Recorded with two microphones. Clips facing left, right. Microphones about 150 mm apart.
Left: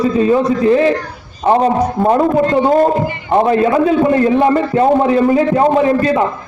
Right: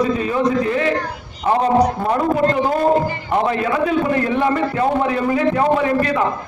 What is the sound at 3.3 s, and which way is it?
A man's voice, 30° left (ahead or behind).